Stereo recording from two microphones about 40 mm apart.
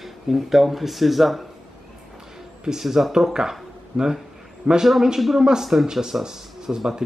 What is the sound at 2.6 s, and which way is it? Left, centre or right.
Speech, centre.